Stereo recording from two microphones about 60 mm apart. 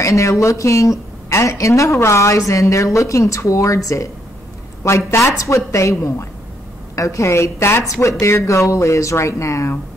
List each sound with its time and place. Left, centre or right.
0.0 s a woman's voice: left